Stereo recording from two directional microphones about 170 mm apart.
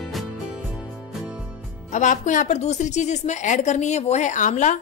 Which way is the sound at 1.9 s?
50° left (ahead or behind).